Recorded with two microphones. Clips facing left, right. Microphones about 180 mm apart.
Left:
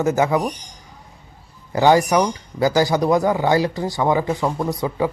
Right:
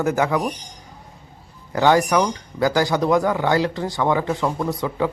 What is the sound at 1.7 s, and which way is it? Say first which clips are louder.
Speech: left 2 dB; 15° left (ahead or behind).